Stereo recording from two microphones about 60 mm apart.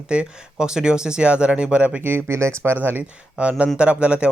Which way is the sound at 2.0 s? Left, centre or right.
Right.